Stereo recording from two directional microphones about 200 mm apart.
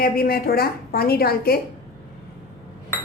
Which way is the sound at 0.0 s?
50° left (ahead or behind).